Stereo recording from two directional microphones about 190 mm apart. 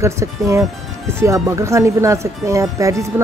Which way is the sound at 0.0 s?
15° right (ahead or behind).